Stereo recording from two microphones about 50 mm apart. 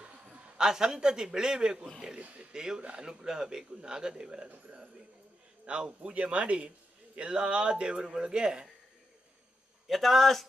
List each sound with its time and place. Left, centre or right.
0.6 s a man's voice: centre
2.1 s speech: right
2.5 s a man's voice: centre
5.7 s a man's voice: right
9.8 s a man's voice: centre